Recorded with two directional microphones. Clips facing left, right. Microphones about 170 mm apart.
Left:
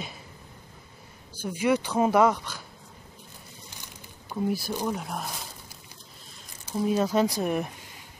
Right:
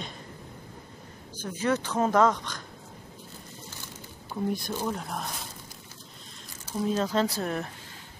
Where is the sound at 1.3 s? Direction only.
10° left (ahead or behind).